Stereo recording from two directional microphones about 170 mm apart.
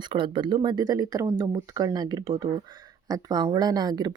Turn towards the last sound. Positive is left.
turn(degrees=-25)  # may be behind; listen again after turning